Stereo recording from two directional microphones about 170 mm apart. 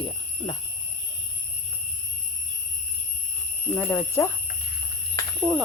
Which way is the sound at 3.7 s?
15° left (ahead or behind).